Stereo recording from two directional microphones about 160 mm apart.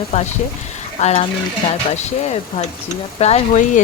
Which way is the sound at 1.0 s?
40° left (ahead or behind).